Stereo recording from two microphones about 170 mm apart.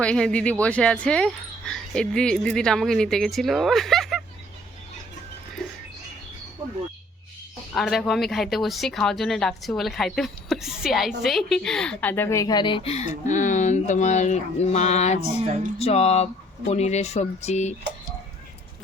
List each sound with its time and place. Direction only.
0.0 s speech: 5° left (ahead or behind)
7.7 s speech: centre (ahead or behind); by 17.7 s 40° left (ahead or behind)